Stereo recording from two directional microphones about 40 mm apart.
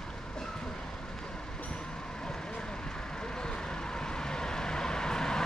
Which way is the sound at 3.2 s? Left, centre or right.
Left.